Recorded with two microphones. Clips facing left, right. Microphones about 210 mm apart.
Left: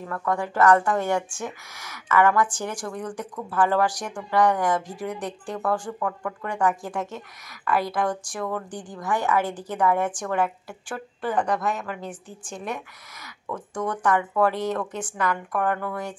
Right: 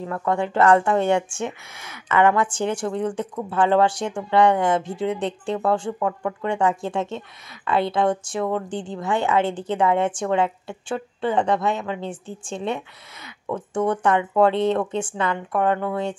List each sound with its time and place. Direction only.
0.0 s a woman's voice: 25° right (ahead or behind)